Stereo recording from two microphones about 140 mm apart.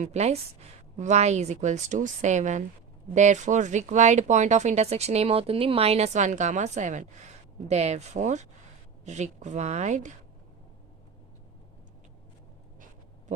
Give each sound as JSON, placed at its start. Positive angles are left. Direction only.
{"t": 0.0, "sound": "a woman's voice", "side_deg": -50}